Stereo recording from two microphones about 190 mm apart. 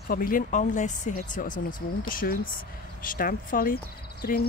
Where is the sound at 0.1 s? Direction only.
45° left (ahead or behind).